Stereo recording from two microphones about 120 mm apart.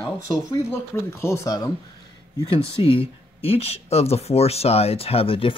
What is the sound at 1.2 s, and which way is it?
Speech, 25° left (ahead or behind).